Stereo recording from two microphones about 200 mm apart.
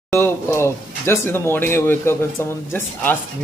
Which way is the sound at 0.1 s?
10° left (ahead or behind).